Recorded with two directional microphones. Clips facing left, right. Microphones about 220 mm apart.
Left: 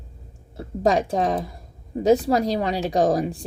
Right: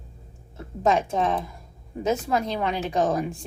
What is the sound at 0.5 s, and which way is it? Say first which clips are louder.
A woman's voice: left 2 dB; 35° left (ahead or behind).